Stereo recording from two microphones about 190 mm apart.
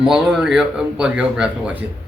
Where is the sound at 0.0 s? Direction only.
5° right (ahead or behind).